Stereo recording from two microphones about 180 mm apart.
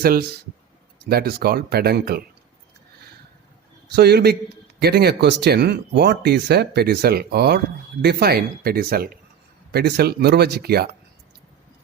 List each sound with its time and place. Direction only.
0.0 s speech: 60° right (ahead or behind)
3.9 s speech: 65° right (ahead or behind)